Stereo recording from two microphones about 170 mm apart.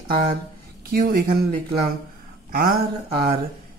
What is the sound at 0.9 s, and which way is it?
Speech, 60° right (ahead or behind).